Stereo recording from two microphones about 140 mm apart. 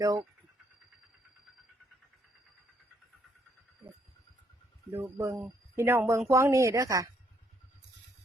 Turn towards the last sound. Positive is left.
turn(degrees=-25)  # may be behind; listen again after turning